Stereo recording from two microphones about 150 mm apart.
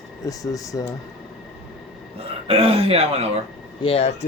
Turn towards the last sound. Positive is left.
turn(degrees=45)  # may be behind; listen again after turning